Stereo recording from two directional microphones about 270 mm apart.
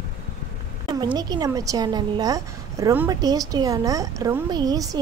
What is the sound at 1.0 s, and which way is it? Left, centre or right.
A woman's voice, centre.